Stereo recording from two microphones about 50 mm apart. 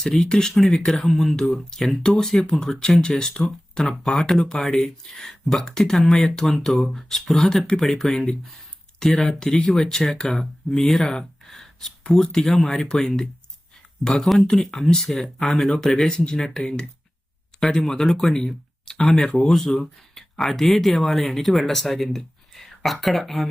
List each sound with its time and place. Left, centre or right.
0.0 s speech: centre
4.4 s speech: centre
19.5 s speech: centre